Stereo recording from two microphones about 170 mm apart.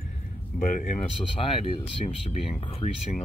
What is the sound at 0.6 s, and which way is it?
Speech, 50° left (ahead or behind).